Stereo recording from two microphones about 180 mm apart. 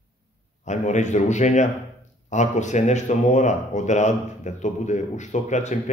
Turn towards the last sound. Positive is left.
turn(degrees=40)  # may be behind; listen again after turning